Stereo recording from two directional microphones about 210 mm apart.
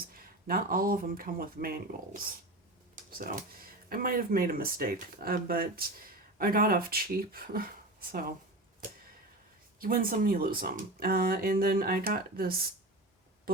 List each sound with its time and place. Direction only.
0.1 s speech: 45° right (ahead or behind)
9.8 s speech: 45° right (ahead or behind)